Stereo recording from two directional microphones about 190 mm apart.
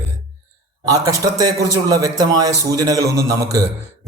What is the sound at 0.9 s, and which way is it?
A man's voice, 20° right (ahead or behind).